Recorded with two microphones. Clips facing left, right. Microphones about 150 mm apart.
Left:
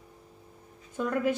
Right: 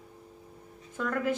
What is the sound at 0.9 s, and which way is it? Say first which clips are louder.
Speech: left 3 dB; 20° left (ahead or behind).